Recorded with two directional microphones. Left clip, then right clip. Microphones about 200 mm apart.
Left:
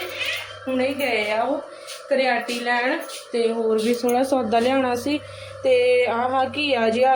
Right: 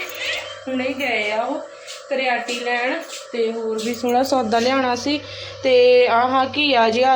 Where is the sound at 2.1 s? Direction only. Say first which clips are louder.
Even; 15° left (ahead or behind).